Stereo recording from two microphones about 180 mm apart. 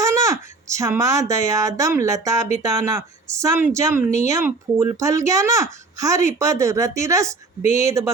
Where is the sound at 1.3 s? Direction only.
20° right (ahead or behind).